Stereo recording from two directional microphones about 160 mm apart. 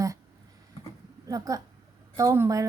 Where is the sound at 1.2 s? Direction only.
20° right (ahead or behind).